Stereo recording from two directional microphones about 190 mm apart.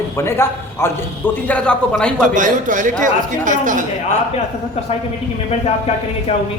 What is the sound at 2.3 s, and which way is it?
Speech, 40° right (ahead or behind).